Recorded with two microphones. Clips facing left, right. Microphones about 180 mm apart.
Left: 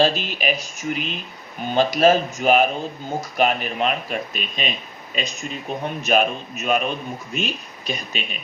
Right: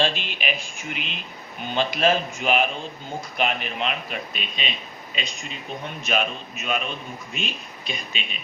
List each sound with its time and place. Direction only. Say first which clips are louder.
0.0 s speech: left 5 dB; 40° left (ahead or behind)